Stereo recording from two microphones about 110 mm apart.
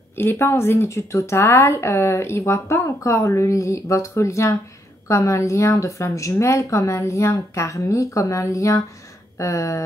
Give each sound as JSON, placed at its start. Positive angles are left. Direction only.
{"t": 0.1, "sound": "a woman's voice", "side_deg": 20}